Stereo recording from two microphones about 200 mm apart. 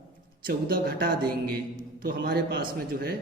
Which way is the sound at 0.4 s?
50° right (ahead or behind).